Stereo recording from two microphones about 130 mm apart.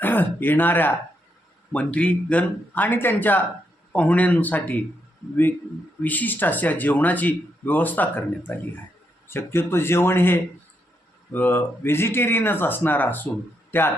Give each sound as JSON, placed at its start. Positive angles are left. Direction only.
{"t": 0.0, "sound": "speech", "side_deg": 15}
{"t": 6.0, "sound": "speech", "side_deg": 15}